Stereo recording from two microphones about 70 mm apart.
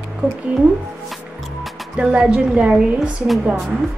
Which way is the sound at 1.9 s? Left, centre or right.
Centre.